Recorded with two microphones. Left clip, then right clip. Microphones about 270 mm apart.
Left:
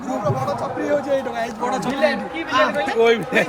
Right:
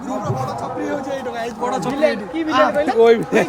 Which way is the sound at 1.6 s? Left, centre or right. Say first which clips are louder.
Right 2 dB; right.